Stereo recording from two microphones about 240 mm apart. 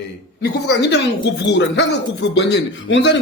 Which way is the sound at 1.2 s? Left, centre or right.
Left.